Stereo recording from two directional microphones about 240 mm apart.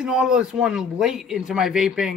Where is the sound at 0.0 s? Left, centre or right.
Centre.